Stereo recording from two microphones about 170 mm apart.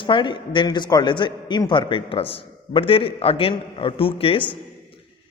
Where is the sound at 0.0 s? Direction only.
30° left (ahead or behind).